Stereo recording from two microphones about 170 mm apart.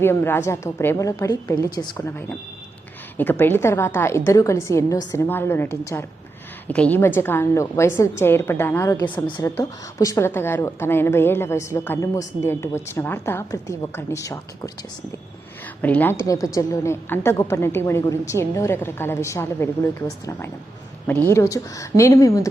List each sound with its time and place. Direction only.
0.0 s a woman's voice: 15° left (ahead or behind)
2.0 s a woman's voice: 10° left (ahead or behind); by 9.5 s 30° left (ahead or behind)
9.6 s a woman's voice: 20° left (ahead or behind)
15.6 s a woman's voice: 10° left (ahead or behind)
21.1 s a woman's voice: 10° left (ahead or behind)